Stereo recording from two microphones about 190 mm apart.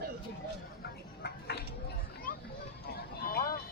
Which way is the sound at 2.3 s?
45° left (ahead or behind).